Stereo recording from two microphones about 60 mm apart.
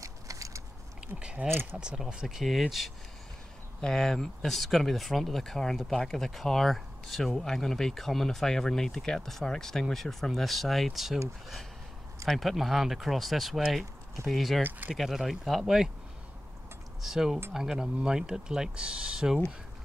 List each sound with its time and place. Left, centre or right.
0.0 s a sound: right
1.0 s speech: centre
1.5 s speech: right
2.2 s speech: centre
12.3 s speech: centre
17.0 s speech: centre